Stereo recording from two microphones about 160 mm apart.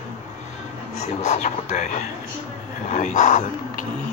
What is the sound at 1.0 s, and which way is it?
Speech, 45° left (ahead or behind).